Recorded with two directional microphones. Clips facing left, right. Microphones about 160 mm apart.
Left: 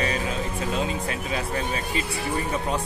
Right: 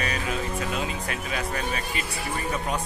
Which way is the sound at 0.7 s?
30° left (ahead or behind).